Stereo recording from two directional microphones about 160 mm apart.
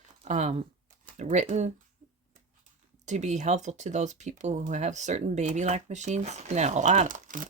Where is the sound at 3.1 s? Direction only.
45° right (ahead or behind).